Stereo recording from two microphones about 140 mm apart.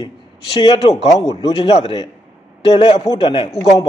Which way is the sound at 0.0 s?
35° left (ahead or behind).